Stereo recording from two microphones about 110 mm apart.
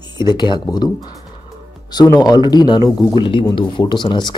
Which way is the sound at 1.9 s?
35° left (ahead or behind).